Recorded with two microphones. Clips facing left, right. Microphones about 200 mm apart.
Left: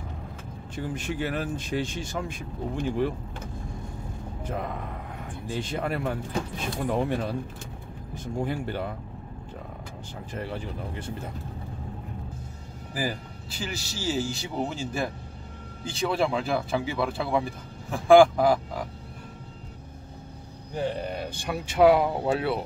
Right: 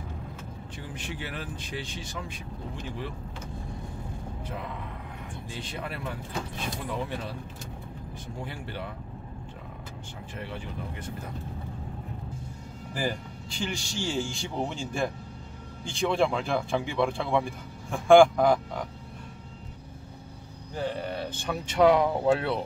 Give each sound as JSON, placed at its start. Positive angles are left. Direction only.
{"t": 0.7, "sound": "speech", "side_deg": 45}
{"t": 4.4, "sound": "a man's voice", "side_deg": 45}
{"t": 8.4, "sound": "speech", "side_deg": 45}
{"t": 10.3, "sound": "speech", "side_deg": 40}
{"t": 12.9, "sound": "a man's voice", "side_deg": 5}
{"t": 20.7, "sound": "speech", "side_deg": 15}